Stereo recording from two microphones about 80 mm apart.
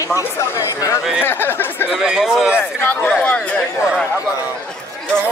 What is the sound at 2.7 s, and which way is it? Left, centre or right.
Speech, left.